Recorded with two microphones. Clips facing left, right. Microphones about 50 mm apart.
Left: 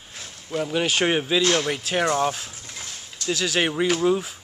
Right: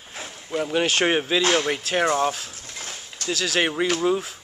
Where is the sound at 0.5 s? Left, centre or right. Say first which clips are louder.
Right 1 dB; centre.